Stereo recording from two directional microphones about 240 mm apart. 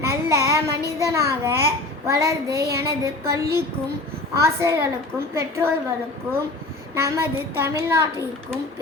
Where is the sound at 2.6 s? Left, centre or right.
Right.